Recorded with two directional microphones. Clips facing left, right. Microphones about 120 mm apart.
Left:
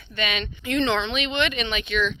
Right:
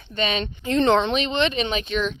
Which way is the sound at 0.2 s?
35° right (ahead or behind).